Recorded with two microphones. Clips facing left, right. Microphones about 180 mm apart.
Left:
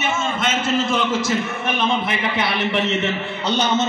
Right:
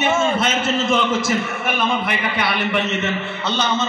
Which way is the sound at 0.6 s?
25° right (ahead or behind).